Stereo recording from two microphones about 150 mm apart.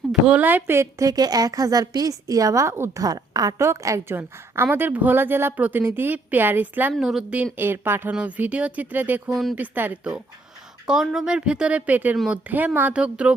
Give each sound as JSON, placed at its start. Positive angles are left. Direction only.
{"t": 0.1, "sound": "a woman's voice", "side_deg": -10}
{"t": 9.3, "sound": "a woman's voice", "side_deg": 0}
{"t": 9.6, "sound": "a woman's voice", "side_deg": -10}
{"t": 12.1, "sound": "a woman's voice", "side_deg": 0}
{"t": 12.5, "sound": "a woman's voice", "side_deg": -10}